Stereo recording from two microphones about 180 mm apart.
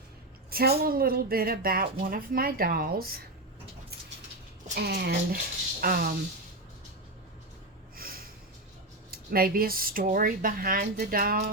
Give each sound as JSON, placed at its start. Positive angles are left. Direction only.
{"t": 0.5, "sound": "speech", "side_deg": -60}
{"t": 4.7, "sound": "speech", "side_deg": -60}
{"t": 7.9, "sound": "snort", "side_deg": -55}
{"t": 9.0, "sound": "speech", "side_deg": -55}